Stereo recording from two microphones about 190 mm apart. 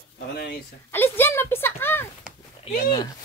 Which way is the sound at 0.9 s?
10° left (ahead or behind).